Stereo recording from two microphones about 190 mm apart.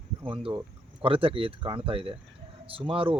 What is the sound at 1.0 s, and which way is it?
Speech, 30° right (ahead or behind).